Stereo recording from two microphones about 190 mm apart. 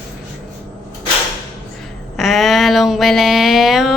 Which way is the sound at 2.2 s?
Centre (ahead or behind).